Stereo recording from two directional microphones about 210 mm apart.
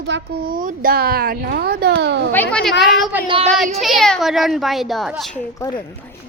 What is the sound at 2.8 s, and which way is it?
Speech, centre (ahead or behind).